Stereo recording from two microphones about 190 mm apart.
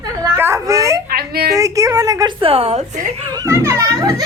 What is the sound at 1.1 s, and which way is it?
Speech, 55° right (ahead or behind).